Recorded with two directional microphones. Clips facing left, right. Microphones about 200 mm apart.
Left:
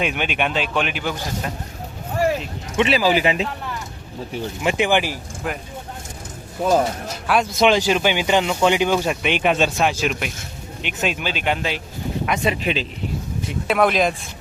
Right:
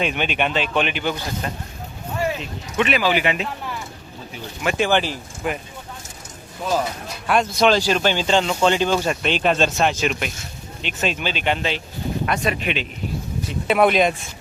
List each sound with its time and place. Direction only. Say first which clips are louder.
0.0 s speech: even; 5° left (ahead or behind)
2.7 s speech: left 2 dB; 30° left (ahead or behind)
4.6 s speech: even; 15° left (ahead or behind)
6.6 s speech: left 5 dB; 45° left (ahead or behind)
7.3 s speech: even; 5° left (ahead or behind)
7.6 s speech: left 1 dB; 15° left (ahead or behind)
12.5 s speech: left 2 dB; 35° left (ahead or behind)
13.7 s speech: right 1 dB; centre (ahead or behind)